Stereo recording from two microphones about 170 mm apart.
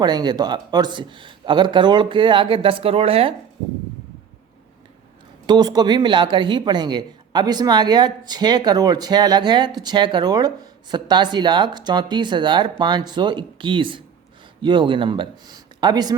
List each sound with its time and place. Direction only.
0.0 s speech: 25° right (ahead or behind)
5.5 s speech: 25° right (ahead or behind)